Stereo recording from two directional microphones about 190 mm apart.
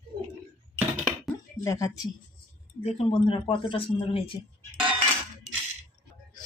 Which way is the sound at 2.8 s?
30° left (ahead or behind).